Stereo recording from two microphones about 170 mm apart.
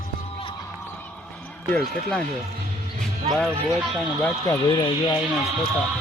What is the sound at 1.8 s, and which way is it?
Speech, 5° left (ahead or behind).